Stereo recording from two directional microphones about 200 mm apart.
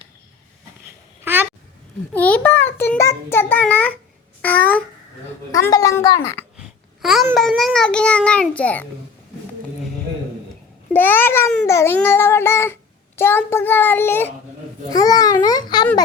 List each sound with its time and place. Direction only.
1.2 s babbling: 10° right (ahead or behind)
2.1 s a child's voice: 10° left (ahead or behind)
6.6 s babbling: centre (ahead or behind)
7.3 s a child's voice: centre (ahead or behind)
10.9 s a child's voice: 10° left (ahead or behind)